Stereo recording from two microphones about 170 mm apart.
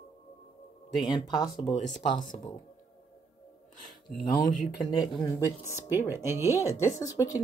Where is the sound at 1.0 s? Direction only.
25° left (ahead or behind).